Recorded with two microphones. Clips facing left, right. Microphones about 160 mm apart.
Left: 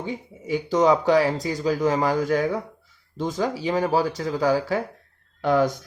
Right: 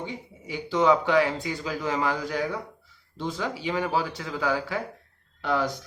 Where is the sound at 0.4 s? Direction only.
45° left (ahead or behind).